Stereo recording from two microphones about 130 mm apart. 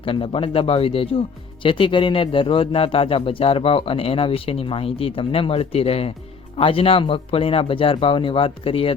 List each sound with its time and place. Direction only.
0.0 s a man's voice: 45° left (ahead or behind)